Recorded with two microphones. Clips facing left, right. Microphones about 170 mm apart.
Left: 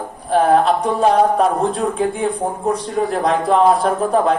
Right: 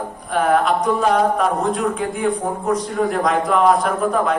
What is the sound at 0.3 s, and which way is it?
A man's voice, 30° left (ahead or behind).